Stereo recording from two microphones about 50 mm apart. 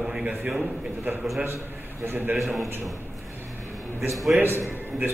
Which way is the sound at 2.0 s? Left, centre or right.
Right.